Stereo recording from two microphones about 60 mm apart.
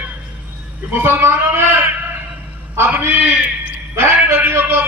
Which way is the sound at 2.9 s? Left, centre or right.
Right.